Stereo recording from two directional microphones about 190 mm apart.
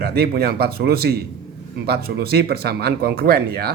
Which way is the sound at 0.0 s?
55° right (ahead or behind).